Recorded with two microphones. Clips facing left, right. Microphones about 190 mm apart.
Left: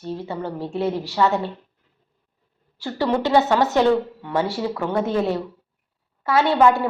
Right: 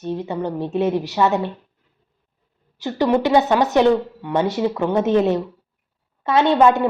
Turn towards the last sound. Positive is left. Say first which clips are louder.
# right 2 dB
turn(degrees=-20)  # may be behind; listen again after turning